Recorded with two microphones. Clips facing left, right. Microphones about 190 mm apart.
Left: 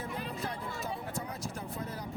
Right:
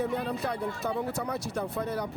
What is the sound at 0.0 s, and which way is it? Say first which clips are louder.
Speech: right 8 dB; 70° right (ahead or behind).